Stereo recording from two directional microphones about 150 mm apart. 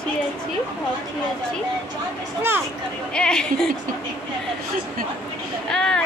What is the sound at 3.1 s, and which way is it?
Speech, 5° left (ahead or behind).